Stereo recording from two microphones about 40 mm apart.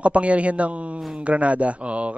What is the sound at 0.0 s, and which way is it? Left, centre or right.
Speech, right.